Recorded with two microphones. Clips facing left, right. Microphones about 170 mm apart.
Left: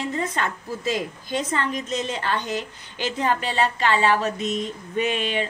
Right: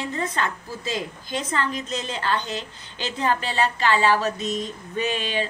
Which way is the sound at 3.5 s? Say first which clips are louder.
Even; 25° left (ahead or behind).